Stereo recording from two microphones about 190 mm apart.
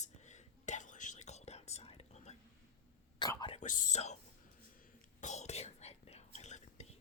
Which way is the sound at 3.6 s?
45° left (ahead or behind).